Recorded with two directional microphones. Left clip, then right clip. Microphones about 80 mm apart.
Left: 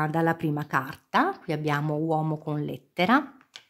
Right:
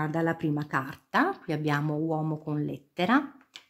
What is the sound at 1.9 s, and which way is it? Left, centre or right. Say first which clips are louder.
Speech: left 3 dB; left.